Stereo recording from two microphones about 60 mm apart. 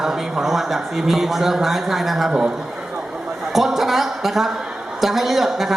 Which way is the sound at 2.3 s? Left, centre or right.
Centre.